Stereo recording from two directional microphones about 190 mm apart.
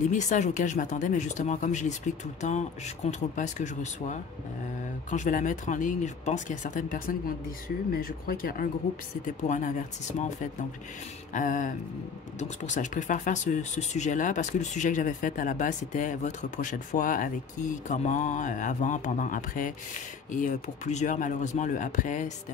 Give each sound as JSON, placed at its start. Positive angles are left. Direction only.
{"t": 0.1, "sound": "speech", "side_deg": 40}